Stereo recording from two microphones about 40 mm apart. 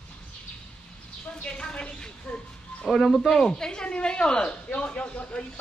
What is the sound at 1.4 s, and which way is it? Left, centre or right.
Speech, left.